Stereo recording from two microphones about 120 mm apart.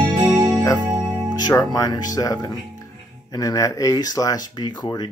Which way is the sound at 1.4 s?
35° left (ahead or behind).